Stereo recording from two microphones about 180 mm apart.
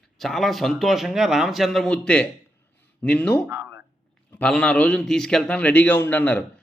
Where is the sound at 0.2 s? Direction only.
Centre (ahead or behind).